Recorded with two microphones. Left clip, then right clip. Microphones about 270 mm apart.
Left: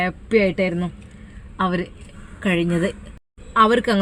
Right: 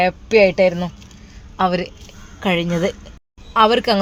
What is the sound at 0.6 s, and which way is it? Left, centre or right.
Speech, right.